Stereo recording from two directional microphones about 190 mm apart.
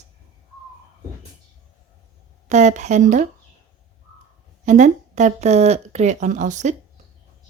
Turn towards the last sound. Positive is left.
turn(degrees=-40)  # may be behind; listen again after turning